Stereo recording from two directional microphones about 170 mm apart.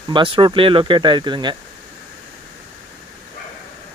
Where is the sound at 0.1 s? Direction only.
30° right (ahead or behind).